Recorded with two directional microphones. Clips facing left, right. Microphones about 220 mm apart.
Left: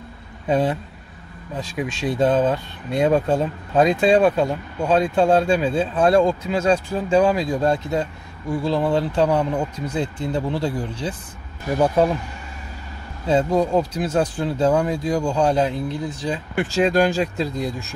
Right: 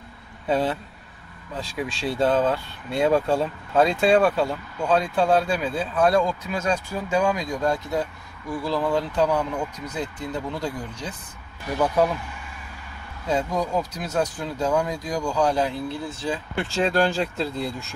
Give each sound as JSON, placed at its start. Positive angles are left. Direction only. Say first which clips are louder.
{"t": 0.5, "sound": "speech", "louder": "left 3 dB", "side_deg": 15}
{"t": 13.3, "sound": "speech", "louder": "left 6 dB", "side_deg": 30}